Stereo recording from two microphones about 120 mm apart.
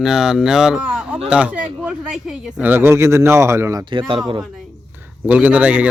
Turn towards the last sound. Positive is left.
turn(degrees=-10)  # may be behind; listen again after turning